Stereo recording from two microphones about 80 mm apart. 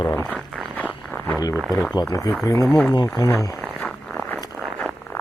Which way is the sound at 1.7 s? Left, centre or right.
Left.